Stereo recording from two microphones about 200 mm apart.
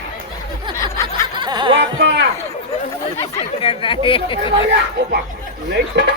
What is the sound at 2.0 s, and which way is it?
Speech, 60° right (ahead or behind).